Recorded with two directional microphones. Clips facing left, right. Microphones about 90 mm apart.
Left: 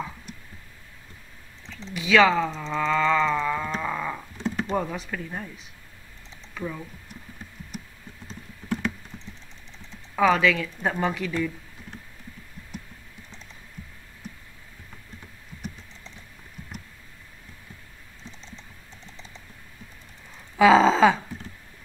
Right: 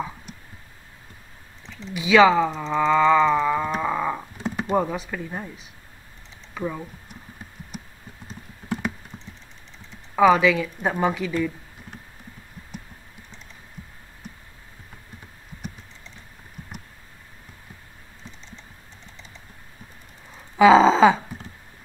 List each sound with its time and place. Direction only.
2.0 s speech: 5° right (ahead or behind)
8.3 s clip-clop: 15° right (ahead or behind)
10.1 s a woman's voice: 10° right (ahead or behind)
20.5 s a sound: 5° right (ahead or behind)